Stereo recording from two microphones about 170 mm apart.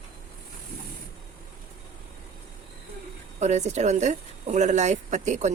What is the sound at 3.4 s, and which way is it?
A woman's voice, 40° right (ahead or behind).